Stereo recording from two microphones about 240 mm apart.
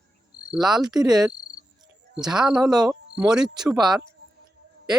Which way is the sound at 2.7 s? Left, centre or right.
Centre.